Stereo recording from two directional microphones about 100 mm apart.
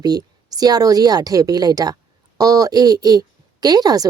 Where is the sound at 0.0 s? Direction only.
40° right (ahead or behind).